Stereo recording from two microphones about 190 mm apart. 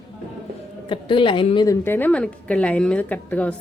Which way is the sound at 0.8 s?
25° left (ahead or behind).